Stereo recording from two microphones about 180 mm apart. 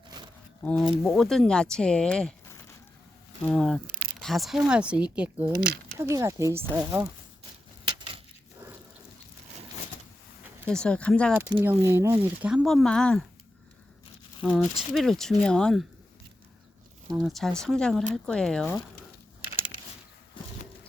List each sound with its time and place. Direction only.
0.6 s speech: 5° left (ahead or behind)
3.4 s speech: 5° left (ahead or behind)
7.9 s a sound: 25° right (ahead or behind)
10.7 s speech: 5° left (ahead or behind)
11.6 s speech: 10° right (ahead or behind); by 13.2 s 5° left (ahead or behind)
14.4 s speech: centre (ahead or behind)
17.2 s speech: centre (ahead or behind)